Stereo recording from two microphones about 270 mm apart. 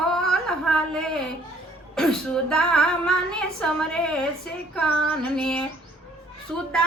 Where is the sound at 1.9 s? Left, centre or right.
Centre.